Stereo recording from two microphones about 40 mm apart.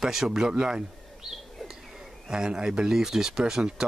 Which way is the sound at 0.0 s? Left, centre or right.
Centre.